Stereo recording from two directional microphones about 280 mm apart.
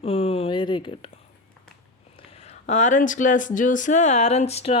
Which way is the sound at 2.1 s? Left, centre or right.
Left.